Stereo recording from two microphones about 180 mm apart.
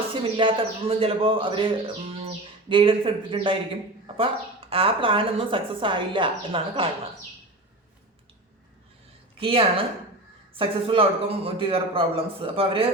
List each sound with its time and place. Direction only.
0.1 s speech: 30° right (ahead or behind)
9.4 s a man's voice: 30° right (ahead or behind)